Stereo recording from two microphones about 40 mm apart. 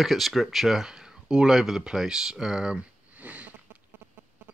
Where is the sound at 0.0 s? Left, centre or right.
Centre.